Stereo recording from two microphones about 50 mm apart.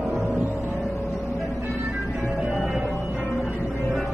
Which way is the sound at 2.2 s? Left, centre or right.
Centre.